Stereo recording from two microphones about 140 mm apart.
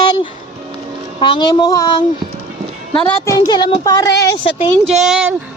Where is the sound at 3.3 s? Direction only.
30° left (ahead or behind).